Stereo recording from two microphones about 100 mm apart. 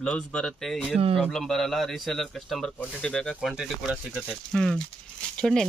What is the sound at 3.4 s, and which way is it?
Speech, 5° right (ahead or behind).